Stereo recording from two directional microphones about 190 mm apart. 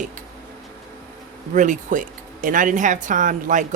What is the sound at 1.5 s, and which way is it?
Speech, 40° right (ahead or behind).